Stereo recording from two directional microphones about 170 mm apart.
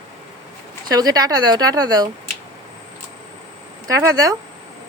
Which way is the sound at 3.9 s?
20° right (ahead or behind).